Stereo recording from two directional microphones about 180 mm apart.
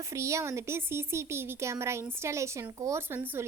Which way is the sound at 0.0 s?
15° right (ahead or behind).